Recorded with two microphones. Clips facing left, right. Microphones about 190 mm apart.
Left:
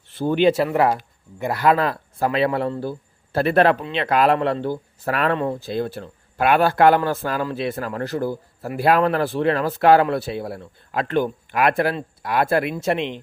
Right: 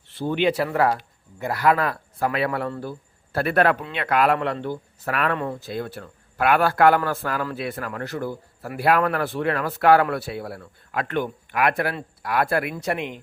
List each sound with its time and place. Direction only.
0.2 s speech: 40° left (ahead or behind)
0.5 s speech: 20° left (ahead or behind)